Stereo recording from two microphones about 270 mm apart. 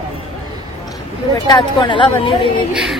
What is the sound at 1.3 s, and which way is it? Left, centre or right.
Speech, centre.